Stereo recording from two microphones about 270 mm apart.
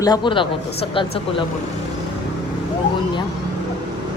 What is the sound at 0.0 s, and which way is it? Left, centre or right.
A woman's voice, centre.